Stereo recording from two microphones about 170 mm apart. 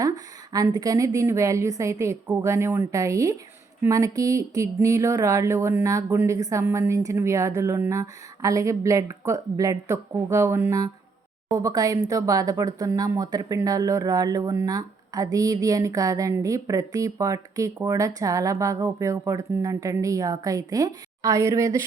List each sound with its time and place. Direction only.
0.0 s speech: 20° right (ahead or behind)